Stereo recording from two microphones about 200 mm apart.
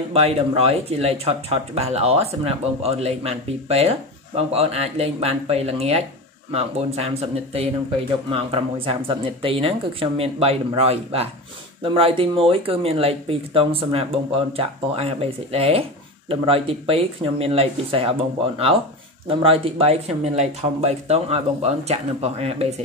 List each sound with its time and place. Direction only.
0.1 s speech: 30° right (ahead or behind)
19.2 s speech: 30° right (ahead or behind)